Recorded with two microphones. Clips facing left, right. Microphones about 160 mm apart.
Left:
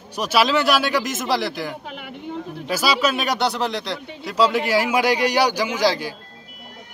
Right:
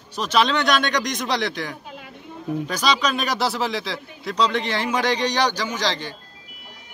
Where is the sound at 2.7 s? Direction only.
5° left (ahead or behind).